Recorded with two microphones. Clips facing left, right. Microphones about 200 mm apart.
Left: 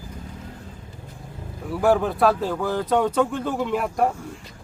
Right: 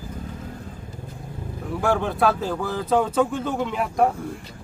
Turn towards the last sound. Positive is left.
turn(degrees=0)  # may be behind; listen again after turning